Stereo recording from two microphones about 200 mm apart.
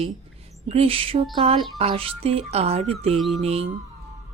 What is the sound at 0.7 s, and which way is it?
Speech, 30° right (ahead or behind).